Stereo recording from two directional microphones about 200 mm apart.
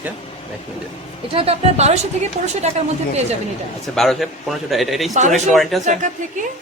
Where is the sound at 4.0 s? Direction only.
Centre (ahead or behind).